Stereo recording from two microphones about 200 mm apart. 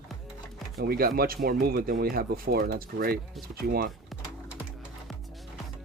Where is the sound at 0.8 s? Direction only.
50° right (ahead or behind).